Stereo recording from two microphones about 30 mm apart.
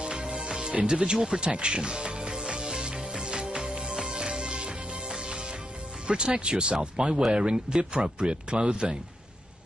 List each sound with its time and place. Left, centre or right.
0.0 s music: right
0.8 s speech: right
1.1 s speech: centre
1.4 s music: right
6.0 s speech: right